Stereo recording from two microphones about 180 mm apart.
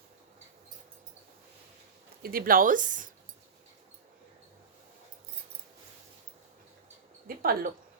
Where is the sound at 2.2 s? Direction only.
55° right (ahead or behind).